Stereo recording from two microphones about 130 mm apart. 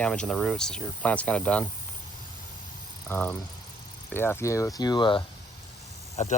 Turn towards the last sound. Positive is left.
turn(degrees=60)  # may be behind; listen again after turning